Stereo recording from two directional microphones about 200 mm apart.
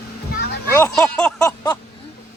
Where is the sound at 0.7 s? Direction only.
10° left (ahead or behind).